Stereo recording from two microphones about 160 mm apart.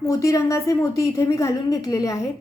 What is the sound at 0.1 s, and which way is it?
A woman's voice, 20° left (ahead or behind).